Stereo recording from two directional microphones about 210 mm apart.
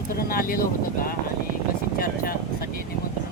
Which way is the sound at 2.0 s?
45° left (ahead or behind).